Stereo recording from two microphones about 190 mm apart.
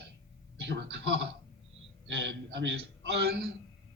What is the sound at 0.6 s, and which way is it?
A man's voice, 65° right (ahead or behind).